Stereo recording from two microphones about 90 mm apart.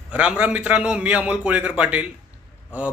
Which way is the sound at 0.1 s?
15° right (ahead or behind).